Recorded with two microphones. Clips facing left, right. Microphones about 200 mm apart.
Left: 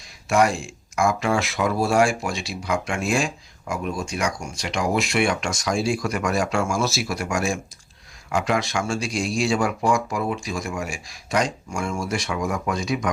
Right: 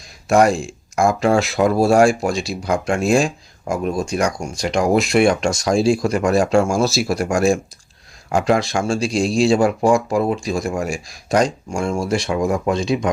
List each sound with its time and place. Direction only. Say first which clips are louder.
0.3 s speech: right 5 dB; 40° right (ahead or behind)